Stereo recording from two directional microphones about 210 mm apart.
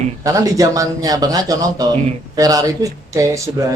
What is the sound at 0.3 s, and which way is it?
Speech, 15° right (ahead or behind).